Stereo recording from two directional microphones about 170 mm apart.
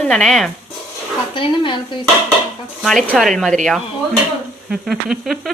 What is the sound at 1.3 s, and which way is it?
Speech, 30° left (ahead or behind).